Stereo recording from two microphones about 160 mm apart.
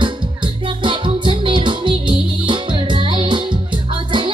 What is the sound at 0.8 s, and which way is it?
Music, 30° right (ahead or behind).